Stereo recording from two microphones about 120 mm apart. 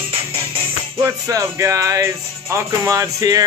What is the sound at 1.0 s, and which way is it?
Music, 25° right (ahead or behind).